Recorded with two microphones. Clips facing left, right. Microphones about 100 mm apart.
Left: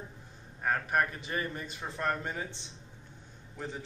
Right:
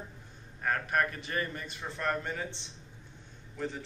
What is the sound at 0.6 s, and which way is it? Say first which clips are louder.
A man's voice: left 1 dB; 15° left (ahead or behind).